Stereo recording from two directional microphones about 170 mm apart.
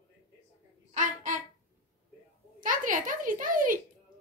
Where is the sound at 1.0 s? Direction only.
50° right (ahead or behind).